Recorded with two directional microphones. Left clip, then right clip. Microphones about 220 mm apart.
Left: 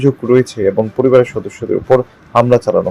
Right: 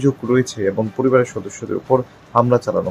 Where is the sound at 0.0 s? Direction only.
10° left (ahead or behind).